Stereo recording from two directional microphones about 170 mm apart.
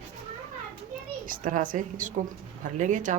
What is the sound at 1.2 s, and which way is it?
A woman's voice, 50° right (ahead or behind).